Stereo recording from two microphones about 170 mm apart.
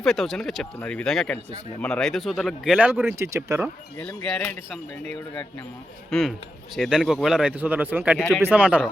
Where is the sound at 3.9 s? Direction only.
5° left (ahead or behind).